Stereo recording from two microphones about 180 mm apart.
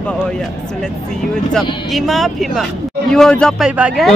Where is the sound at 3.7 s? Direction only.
5° right (ahead or behind).